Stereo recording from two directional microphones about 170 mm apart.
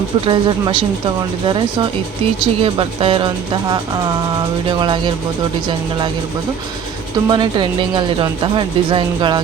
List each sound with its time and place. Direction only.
0.3 s speech: 30° right (ahead or behind)
2.4 s speech: 30° right (ahead or behind)
4.8 s speech: 30° right (ahead or behind)
7.3 s speech: 25° right (ahead or behind)